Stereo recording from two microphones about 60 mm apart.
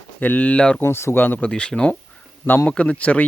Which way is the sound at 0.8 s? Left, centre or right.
Left.